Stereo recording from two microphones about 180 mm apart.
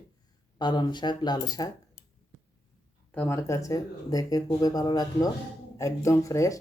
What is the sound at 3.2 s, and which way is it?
Speech, 15° left (ahead or behind).